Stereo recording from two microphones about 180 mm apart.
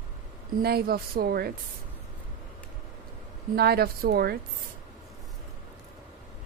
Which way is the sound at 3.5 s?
60° right (ahead or behind).